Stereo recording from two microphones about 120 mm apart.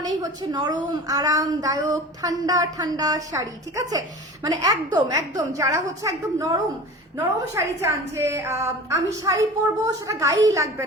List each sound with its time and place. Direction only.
0.2 s a woman's voice: 35° right (ahead or behind)